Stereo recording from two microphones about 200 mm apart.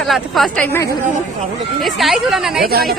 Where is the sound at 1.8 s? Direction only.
Centre (ahead or behind).